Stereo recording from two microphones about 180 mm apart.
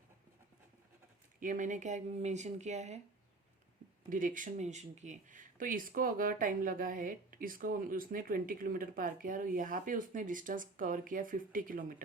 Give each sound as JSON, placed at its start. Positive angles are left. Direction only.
{"t": 1.4, "sound": "speech", "side_deg": -45}
{"t": 4.1, "sound": "speech", "side_deg": -45}